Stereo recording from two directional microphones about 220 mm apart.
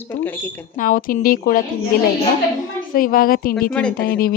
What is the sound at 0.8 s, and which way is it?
Speech, 40° left (ahead or behind).